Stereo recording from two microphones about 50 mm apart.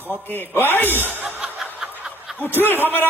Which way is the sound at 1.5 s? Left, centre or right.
Centre.